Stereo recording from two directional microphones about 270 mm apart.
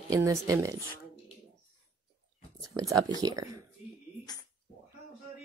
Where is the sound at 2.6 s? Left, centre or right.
Centre.